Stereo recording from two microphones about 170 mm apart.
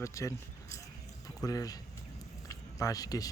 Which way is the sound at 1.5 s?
20° left (ahead or behind).